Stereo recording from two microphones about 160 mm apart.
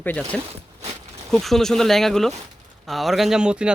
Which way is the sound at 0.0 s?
10° left (ahead or behind).